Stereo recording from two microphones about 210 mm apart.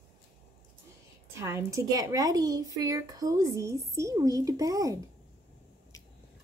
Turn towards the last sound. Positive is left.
turn(degrees=-15)  # may be behind; listen again after turning